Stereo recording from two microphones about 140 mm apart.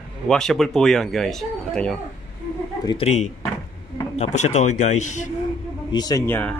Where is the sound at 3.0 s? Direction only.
50° left (ahead or behind).